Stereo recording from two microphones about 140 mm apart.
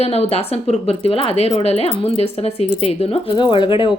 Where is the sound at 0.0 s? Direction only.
50° left (ahead or behind).